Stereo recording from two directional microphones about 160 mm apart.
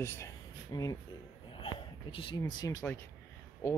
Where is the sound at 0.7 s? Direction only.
25° left (ahead or behind).